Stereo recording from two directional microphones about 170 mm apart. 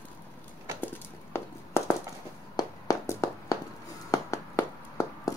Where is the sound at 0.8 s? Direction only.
15° left (ahead or behind).